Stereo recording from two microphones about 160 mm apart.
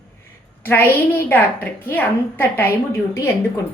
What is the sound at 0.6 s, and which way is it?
A woman's voice, 15° left (ahead or behind).